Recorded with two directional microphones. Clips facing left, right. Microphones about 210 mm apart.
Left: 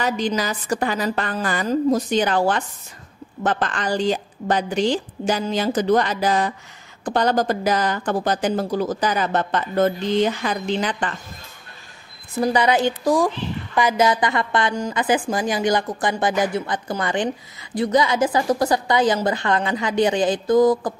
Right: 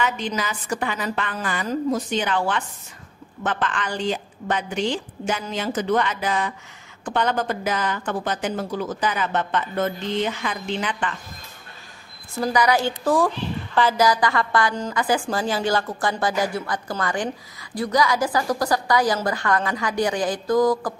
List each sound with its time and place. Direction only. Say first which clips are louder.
0.0 s a woman's voice: left 3 dB; 35° left (ahead or behind)
12.4 s a woman's voice: left 2 dB; 20° left (ahead or behind)